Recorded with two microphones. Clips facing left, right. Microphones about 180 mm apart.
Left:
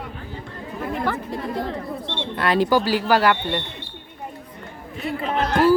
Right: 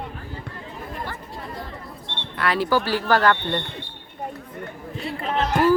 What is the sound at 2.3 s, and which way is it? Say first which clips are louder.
Speech: left 3 dB; 20° left (ahead or behind).